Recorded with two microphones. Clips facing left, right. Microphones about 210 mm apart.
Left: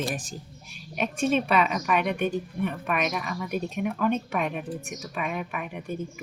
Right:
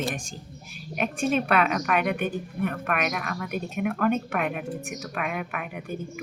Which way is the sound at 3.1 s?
50° right (ahead or behind).